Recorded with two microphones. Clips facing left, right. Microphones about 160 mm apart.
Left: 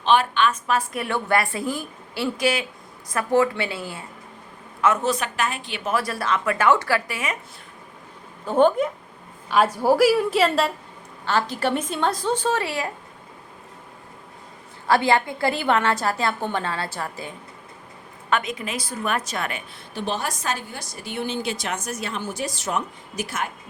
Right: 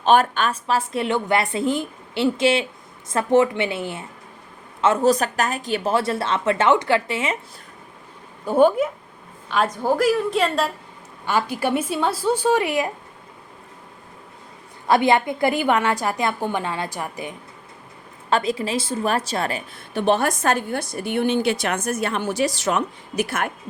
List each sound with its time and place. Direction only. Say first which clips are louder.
0.0 s a woman's voice: right 2 dB; 45° right (ahead or behind); by 4.0 s 20° right (ahead or behind)
4.8 s a woman's voice: right 4 dB; 35° right (ahead or behind)
5.9 s a woman's voice: right 1 dB; 25° right (ahead or behind)
8.4 s a woman's voice: right 2 dB; 10° right (ahead or behind)
9.5 s a woman's voice: left 2 dB; 5° left (ahead or behind)
11.3 s a woman's voice: right 1 dB; 10° right (ahead or behind)
14.8 s a woman's voice: right 2 dB; 20° right (ahead or behind)
18.3 s a woman's voice: right 4 dB; 30° right (ahead or behind)
19.9 s a woman's voice: right 8 dB; 60° right (ahead or behind)